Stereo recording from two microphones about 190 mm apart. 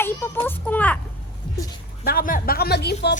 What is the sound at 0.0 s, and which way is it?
Speech, 10° left (ahead or behind).